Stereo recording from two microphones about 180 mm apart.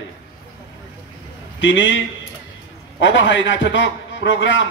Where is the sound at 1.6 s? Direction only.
90° left.